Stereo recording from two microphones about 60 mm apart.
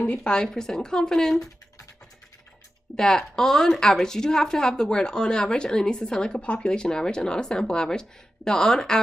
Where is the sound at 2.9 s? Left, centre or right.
Centre.